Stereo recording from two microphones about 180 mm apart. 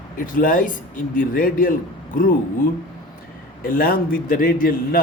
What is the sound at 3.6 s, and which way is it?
Speech, 55° left (ahead or behind).